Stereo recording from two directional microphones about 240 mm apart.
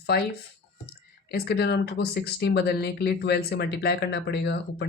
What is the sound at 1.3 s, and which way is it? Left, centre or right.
Speech, left.